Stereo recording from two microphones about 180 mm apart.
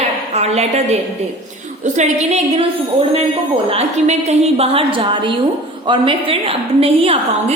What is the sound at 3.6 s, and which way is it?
A woman's voice, 35° right (ahead or behind).